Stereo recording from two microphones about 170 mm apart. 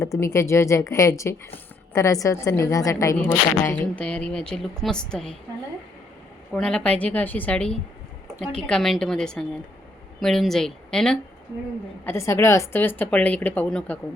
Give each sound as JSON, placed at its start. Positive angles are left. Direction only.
{"t": 0.0, "sound": "a woman's voice", "side_deg": 15}
{"t": 6.5, "sound": "speech", "side_deg": 5}
{"t": 12.0, "sound": "speech", "side_deg": 15}